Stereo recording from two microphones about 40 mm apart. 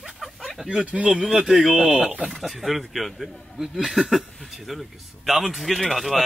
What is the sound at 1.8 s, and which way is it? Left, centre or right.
Speech, right.